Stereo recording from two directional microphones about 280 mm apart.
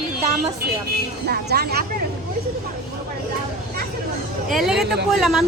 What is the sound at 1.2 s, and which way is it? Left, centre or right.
Speech, right.